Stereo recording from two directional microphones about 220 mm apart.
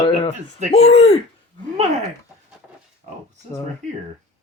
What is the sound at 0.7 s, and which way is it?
Speech, 30° left (ahead or behind).